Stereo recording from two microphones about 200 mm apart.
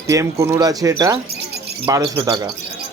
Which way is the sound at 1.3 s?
55° right (ahead or behind).